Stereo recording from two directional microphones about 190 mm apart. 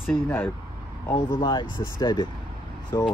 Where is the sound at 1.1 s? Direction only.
25° left (ahead or behind).